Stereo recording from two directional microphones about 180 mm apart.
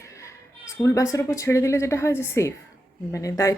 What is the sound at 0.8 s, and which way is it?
Speech, 15° left (ahead or behind).